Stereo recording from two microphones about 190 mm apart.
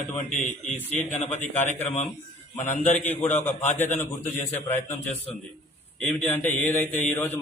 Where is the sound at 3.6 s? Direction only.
35° left (ahead or behind).